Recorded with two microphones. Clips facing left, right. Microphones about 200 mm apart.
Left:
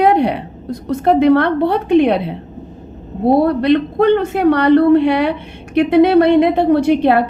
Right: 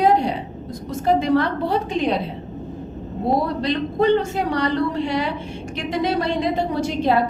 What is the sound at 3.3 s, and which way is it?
A woman's voice, 60° left (ahead or behind).